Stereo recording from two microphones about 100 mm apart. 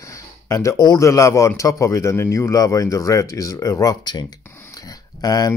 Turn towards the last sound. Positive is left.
turn(degrees=35)  # may be behind; listen again after turning